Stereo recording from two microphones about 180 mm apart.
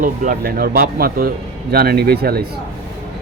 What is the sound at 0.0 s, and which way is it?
Speech, 45° right (ahead or behind).